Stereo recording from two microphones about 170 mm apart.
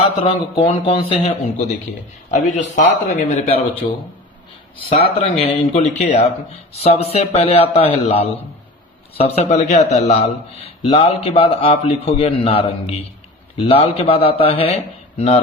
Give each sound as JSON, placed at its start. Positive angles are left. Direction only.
{"t": 0.2, "sound": "a man's voice", "side_deg": 35}
{"t": 4.9, "sound": "a man's voice", "side_deg": 35}